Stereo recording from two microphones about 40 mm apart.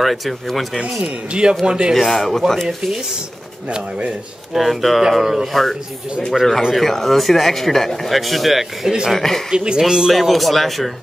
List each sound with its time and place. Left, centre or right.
0.0 s speech: centre
0.7 s speech: right
2.0 s speech: centre
4.6 s speech: centre
5.5 s speech: centre
8.8 s speech: centre
9.1 s speech: centre
9.5 s speech: right
10.1 s speech: centre